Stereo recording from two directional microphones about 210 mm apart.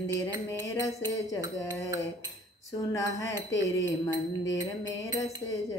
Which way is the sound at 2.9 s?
15° left (ahead or behind).